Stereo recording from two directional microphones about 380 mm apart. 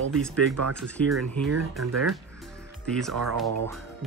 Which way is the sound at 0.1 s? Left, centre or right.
Centre.